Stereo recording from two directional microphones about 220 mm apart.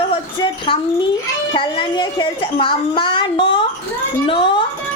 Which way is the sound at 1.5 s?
20° left (ahead or behind).